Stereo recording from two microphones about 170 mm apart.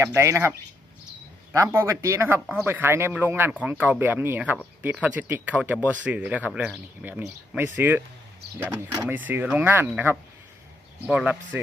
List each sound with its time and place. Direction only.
0.0 s speech: 15° right (ahead or behind)
1.5 s speech: 15° right (ahead or behind)